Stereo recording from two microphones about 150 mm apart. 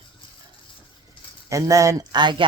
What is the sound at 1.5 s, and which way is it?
Speech, 20° right (ahead or behind).